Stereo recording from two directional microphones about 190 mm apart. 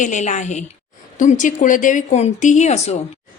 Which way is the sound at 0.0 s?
40° left (ahead or behind).